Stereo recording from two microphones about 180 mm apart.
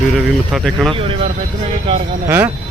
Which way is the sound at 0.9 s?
30° right (ahead or behind).